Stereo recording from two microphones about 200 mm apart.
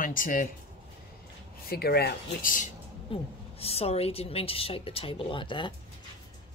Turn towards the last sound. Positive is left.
turn(degrees=25)  # may be behind; listen again after turning